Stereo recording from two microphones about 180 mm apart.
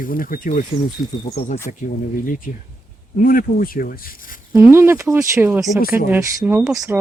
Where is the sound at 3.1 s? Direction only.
50° left (ahead or behind).